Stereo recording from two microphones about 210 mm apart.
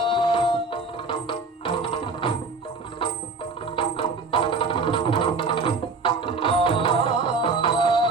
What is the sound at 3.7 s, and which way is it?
Music, 25° left (ahead or behind).